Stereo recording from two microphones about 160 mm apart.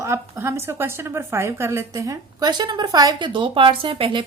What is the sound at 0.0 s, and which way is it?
A woman's voice, 15° right (ahead or behind).